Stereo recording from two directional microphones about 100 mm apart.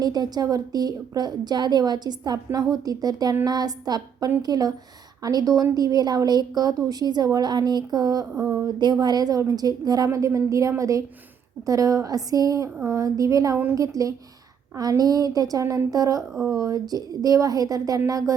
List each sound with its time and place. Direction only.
0.0 s a woman's voice: 40° right (ahead or behind)